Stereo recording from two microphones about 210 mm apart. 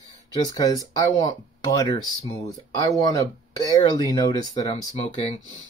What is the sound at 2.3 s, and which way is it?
Speech, 15° left (ahead or behind).